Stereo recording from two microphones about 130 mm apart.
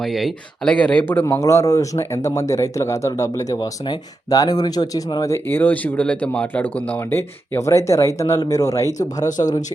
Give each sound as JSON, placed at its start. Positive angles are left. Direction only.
{"t": 0.0, "sound": "speech", "side_deg": 0}
{"t": 1.2, "sound": "speech", "side_deg": 25}
{"t": 5.2, "sound": "speech", "side_deg": 20}